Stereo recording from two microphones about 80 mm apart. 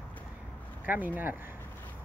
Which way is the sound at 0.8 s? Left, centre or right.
Right.